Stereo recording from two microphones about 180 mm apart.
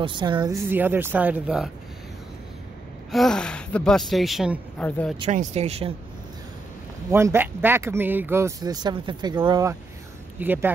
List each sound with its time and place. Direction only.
0.0 s speech: 25° right (ahead or behind)
0.7 s speech: 10° right (ahead or behind)
3.1 s speech: centre (ahead or behind)
5.3 s speech: 40° right (ahead or behind)
7.1 s speech: 15° right (ahead or behind)